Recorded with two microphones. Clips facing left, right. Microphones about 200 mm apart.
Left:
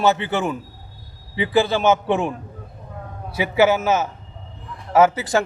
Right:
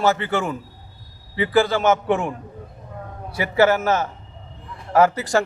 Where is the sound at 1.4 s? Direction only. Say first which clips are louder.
Even; 20° left (ahead or behind).